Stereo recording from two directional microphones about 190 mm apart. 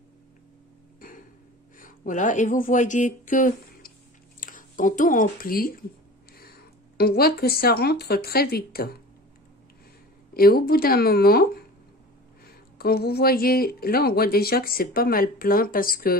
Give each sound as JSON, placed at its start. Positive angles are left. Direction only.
{"t": 1.0, "sound": "a sound", "side_deg": 45}
{"t": 1.8, "sound": "speech", "side_deg": 45}
{"t": 10.3, "sound": "a woman's voice", "side_deg": 55}
{"t": 12.7, "sound": "a woman's voice", "side_deg": 55}